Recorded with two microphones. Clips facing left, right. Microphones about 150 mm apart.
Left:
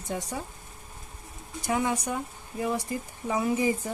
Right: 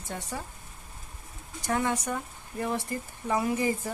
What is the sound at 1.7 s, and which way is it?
Speech, 15° left (ahead or behind).